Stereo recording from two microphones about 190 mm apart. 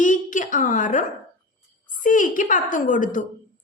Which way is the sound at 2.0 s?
45° left (ahead or behind).